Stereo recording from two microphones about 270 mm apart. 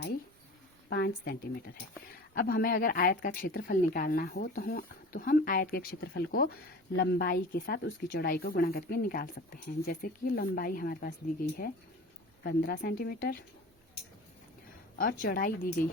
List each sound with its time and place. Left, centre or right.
0.9 s speech: left
12.4 s speech: left
14.9 s speech: left